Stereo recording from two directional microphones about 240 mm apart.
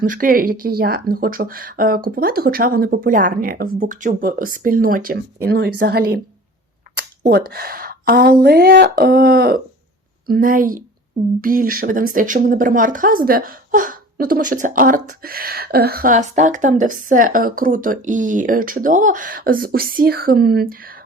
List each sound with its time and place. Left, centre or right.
0.0 s speech: right